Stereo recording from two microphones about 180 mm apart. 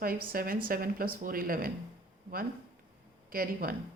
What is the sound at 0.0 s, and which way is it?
Speech, 55° right (ahead or behind).